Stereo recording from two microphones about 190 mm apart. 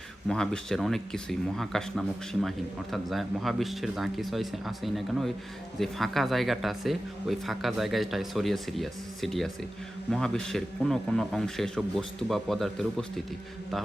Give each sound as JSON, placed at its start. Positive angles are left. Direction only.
{"t": 0.3, "sound": "speech", "side_deg": 5}